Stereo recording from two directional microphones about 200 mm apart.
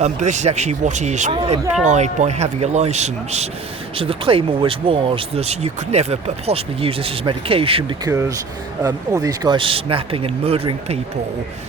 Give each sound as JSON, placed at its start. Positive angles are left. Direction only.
{"t": 0.0, "sound": "speech", "side_deg": -35}